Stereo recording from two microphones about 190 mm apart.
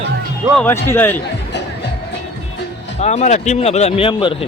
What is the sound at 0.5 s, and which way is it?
Speech, 10° left (ahead or behind).